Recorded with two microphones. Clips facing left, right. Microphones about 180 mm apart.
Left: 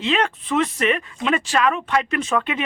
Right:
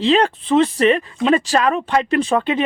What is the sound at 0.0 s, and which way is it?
Speech, 30° right (ahead or behind).